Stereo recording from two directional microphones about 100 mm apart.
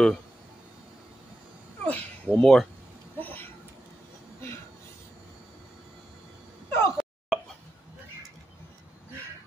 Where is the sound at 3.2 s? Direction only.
15° left (ahead or behind).